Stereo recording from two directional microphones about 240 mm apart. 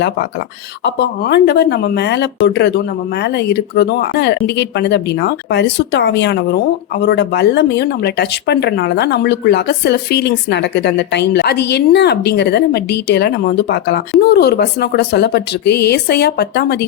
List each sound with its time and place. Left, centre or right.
0.9 s speech: left